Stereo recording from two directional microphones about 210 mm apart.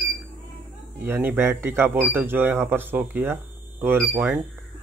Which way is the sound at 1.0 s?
10° right (ahead or behind).